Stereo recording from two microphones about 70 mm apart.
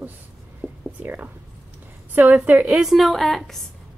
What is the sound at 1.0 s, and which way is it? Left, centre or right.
A woman's voice, right.